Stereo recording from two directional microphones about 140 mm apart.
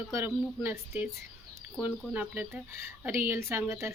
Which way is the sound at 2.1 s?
10° right (ahead or behind).